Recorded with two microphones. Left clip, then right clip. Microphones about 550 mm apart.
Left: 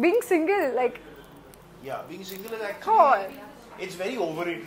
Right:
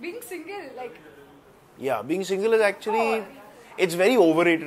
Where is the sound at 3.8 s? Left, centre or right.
Right.